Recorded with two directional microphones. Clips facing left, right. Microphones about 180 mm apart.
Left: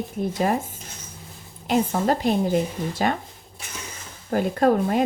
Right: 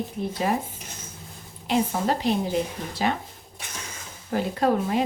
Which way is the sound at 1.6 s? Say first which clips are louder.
Left 2 dB; 45° left (ahead or behind).